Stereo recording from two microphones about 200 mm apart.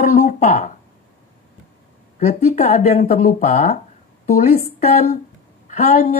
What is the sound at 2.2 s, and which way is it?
Speech, 30° left (ahead or behind).